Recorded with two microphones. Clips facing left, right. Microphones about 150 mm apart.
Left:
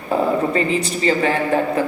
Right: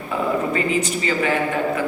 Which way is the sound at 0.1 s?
35° left (ahead or behind).